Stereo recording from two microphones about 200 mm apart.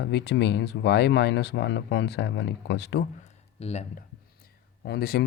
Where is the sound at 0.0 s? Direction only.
60° left (ahead or behind).